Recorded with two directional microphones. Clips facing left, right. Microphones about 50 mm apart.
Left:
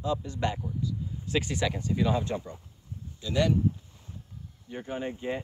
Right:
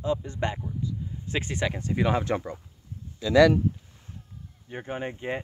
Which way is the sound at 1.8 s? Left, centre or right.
Right.